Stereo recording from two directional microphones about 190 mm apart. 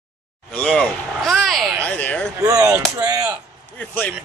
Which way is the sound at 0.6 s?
5° left (ahead or behind).